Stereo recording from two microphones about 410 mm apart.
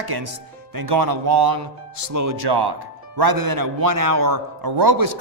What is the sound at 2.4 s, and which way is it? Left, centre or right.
Speech, right.